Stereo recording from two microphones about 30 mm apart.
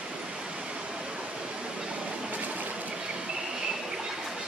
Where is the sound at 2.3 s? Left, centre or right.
Right.